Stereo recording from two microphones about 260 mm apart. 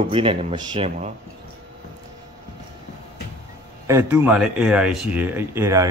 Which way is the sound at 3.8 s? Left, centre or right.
Centre.